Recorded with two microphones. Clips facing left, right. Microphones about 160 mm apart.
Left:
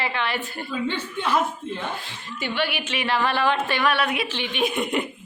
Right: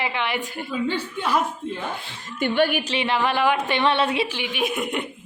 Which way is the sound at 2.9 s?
20° right (ahead or behind).